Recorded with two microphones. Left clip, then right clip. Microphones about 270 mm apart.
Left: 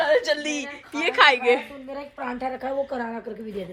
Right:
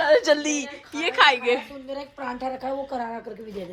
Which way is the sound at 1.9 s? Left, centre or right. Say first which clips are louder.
Even; left.